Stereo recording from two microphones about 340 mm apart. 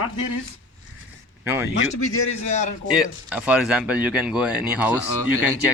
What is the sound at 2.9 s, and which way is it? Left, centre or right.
Speech, centre.